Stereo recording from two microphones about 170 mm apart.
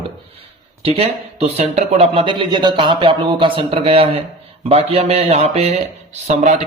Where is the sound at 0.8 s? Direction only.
35° right (ahead or behind).